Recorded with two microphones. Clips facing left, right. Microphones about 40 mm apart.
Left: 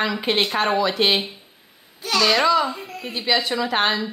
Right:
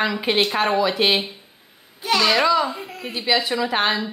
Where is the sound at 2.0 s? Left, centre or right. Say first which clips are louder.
Right 1 dB; centre.